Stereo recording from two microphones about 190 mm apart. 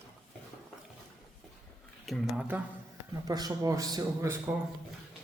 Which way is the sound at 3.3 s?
20° right (ahead or behind).